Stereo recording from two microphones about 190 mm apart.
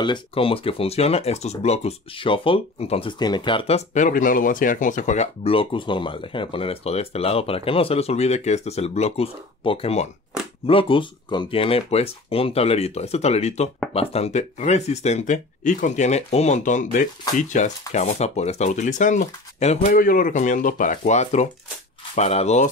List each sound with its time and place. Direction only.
0.0 s speech: 25° left (ahead or behind)